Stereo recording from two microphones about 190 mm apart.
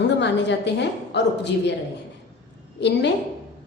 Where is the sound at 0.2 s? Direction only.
65° left (ahead or behind).